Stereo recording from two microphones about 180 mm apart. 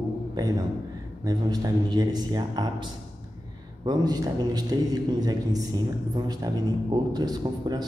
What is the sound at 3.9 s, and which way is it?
A man's voice, 20° right (ahead or behind).